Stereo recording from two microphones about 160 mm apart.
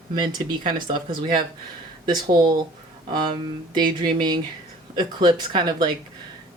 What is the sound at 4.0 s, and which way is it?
Speech, 25° right (ahead or behind).